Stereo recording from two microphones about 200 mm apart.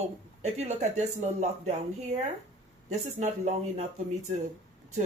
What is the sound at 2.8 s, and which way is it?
A woman's voice, 35° right (ahead or behind).